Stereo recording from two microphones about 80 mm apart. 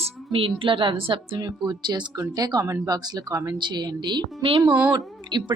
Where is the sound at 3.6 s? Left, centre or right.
Right.